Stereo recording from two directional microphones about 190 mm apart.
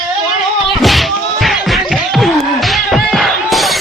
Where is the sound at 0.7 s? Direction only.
Centre (ahead or behind).